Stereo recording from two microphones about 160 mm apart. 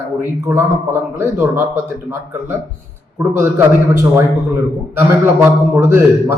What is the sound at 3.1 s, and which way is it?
Speech, 15° right (ahead or behind).